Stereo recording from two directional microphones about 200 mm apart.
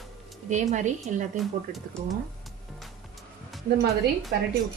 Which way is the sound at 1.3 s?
Centre (ahead or behind).